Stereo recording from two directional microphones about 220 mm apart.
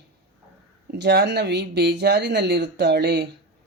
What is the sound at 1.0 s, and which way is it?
Speech, 50° right (ahead or behind).